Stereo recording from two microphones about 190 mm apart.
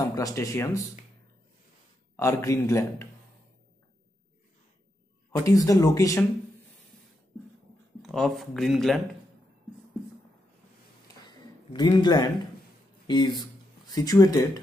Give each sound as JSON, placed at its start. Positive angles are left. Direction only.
{"t": 0.0, "sound": "speech", "side_deg": 20}
{"t": 2.1, "sound": "speech", "side_deg": 15}
{"t": 5.3, "sound": "speech", "side_deg": 20}
{"t": 8.0, "sound": "speech", "side_deg": 0}
{"t": 11.2, "sound": "a sound", "side_deg": 20}
{"t": 13.0, "sound": "speech", "side_deg": 25}